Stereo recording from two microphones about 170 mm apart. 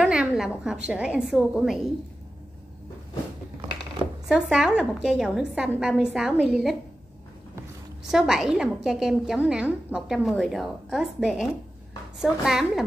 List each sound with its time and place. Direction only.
0.0 s a woman's voice: 5° right (ahead or behind)
4.3 s a woman's voice: 5° right (ahead or behind)
8.1 s a woman's voice: centre (ahead or behind)